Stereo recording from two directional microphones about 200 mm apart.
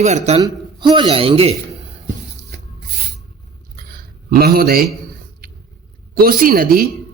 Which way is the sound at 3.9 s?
50° right (ahead or behind).